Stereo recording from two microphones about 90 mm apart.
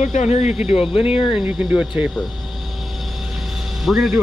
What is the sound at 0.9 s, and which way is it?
Speech, 90° left.